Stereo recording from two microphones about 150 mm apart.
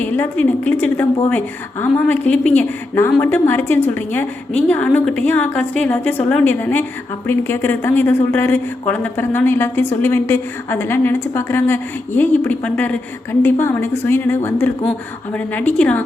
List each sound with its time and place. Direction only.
0.0 s speech: 10° left (ahead or behind)